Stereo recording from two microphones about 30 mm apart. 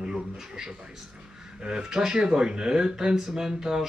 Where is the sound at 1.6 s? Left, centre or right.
Right.